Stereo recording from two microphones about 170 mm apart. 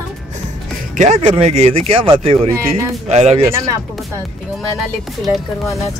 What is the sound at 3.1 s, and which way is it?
Speech, 40° right (ahead or behind).